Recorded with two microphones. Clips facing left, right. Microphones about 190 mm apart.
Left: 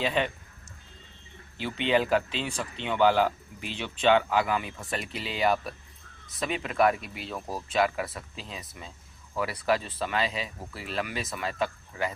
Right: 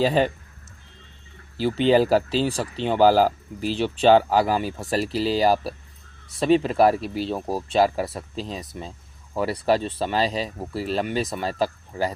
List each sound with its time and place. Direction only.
0.0 s speech: 35° right (ahead or behind)
1.5 s speech: 35° right (ahead or behind)